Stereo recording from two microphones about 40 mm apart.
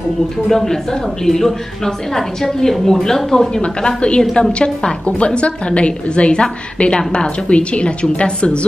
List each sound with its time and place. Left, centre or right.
0.5 s a woman's voice: centre
3.6 s a woman's voice: left